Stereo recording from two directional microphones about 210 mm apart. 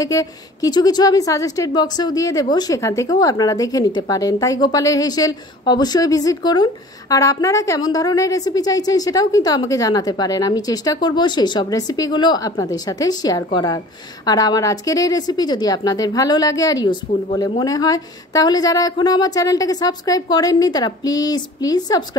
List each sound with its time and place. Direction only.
0.0 s speech: 15° left (ahead or behind)